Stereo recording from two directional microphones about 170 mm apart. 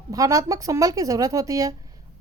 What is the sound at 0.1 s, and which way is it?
A woman's voice, 20° right (ahead or behind).